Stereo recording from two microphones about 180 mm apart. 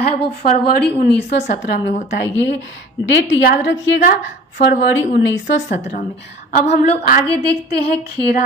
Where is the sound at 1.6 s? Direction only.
75° left (ahead or behind).